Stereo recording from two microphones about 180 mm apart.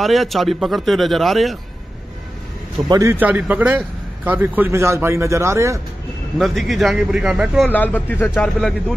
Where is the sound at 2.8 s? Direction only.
20° right (ahead or behind).